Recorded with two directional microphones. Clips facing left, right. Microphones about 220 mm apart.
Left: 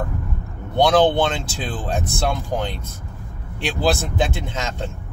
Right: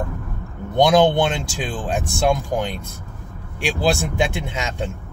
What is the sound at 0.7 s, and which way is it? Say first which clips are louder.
Speech: right 1 dB; 10° right (ahead or behind).